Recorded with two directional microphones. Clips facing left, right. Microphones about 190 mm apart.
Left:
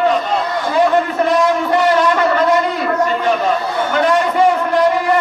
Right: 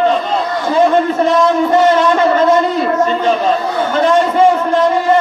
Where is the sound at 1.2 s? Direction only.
25° right (ahead or behind).